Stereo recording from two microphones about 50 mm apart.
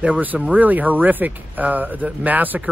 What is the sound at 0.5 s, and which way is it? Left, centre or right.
Speech, right.